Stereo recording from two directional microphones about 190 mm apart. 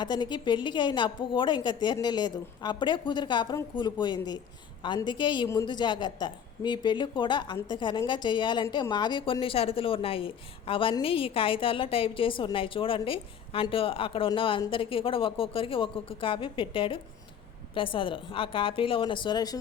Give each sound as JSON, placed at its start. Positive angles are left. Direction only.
{"t": 0.0, "sound": "a woman's voice", "side_deg": 25}